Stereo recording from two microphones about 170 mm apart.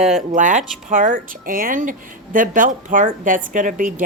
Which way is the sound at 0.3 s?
50° right (ahead or behind).